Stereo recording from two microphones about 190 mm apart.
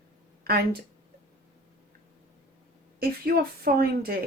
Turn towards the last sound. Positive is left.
turn(degrees=-55)  # may be behind; listen again after turning